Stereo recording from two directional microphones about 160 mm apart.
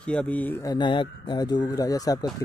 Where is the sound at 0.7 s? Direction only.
30° left (ahead or behind).